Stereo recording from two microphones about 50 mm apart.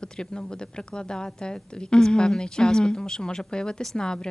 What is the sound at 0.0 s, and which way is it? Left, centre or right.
Speech, centre.